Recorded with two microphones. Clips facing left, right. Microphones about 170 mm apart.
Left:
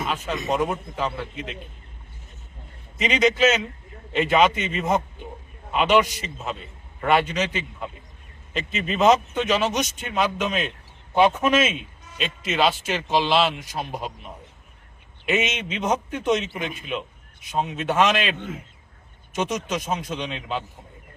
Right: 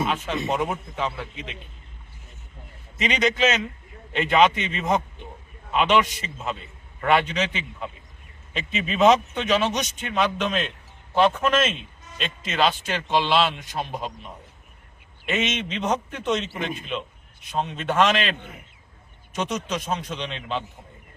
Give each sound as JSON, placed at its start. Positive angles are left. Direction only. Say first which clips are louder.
{"t": 0.0, "sound": "a man's voice", "louder": "right 2 dB", "side_deg": 0}
{"t": 3.0, "sound": "a man's voice", "louder": "left 3 dB", "side_deg": 0}
{"t": 15.3, "sound": "a man's voice", "louder": "left 2 dB", "side_deg": 10}
{"t": 17.5, "sound": "a man's voice", "louder": "left 1 dB", "side_deg": 5}
{"t": 18.3, "sound": "a man's voice", "louder": "left 8 dB", "side_deg": 65}
{"t": 19.4, "sound": "a man's voice", "louder": "left 2 dB", "side_deg": 10}